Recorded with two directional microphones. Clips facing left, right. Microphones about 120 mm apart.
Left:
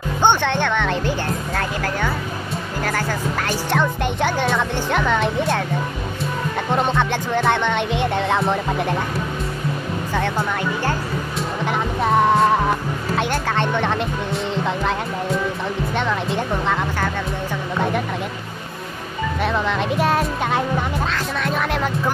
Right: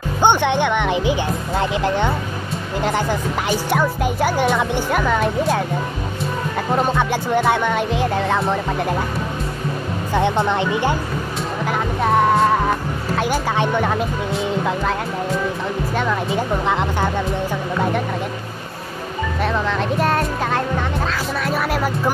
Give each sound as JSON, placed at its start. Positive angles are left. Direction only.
{"t": 0.2, "sound": "speech", "side_deg": -15}
{"t": 6.7, "sound": "speech", "side_deg": -5}
{"t": 10.1, "sound": "speech", "side_deg": -20}
{"t": 11.6, "sound": "music", "side_deg": 0}
{"t": 13.1, "sound": "speech", "side_deg": -5}
{"t": 16.6, "sound": "speech", "side_deg": -15}
{"t": 19.4, "sound": "speech", "side_deg": 0}